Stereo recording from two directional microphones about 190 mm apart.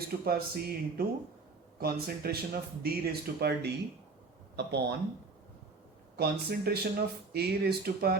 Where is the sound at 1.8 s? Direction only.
55° right (ahead or behind).